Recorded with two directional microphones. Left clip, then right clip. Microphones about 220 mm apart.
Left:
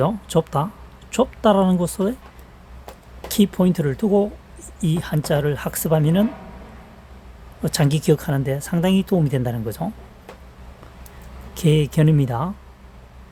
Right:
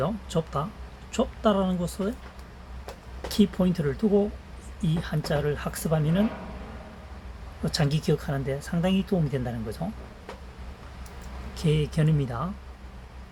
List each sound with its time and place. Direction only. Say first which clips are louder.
0.0 s speech: left 8 dB; 55° left (ahead or behind)
3.3 s speech: left 6 dB; 50° left (ahead or behind)
7.6 s speech: left 6 dB; 55° left (ahead or behind)
11.5 s speech: left 8 dB; 55° left (ahead or behind)